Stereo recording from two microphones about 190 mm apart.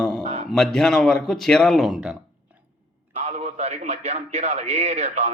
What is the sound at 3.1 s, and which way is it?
Mantra, 35° right (ahead or behind).